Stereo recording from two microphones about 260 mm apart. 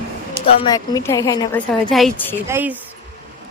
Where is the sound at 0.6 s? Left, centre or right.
Centre.